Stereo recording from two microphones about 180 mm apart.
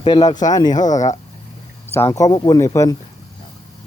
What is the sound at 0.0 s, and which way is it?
Speech, 25° left (ahead or behind).